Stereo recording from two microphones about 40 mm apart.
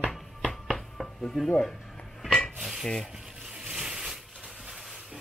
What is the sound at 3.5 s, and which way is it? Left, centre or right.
Boat, centre.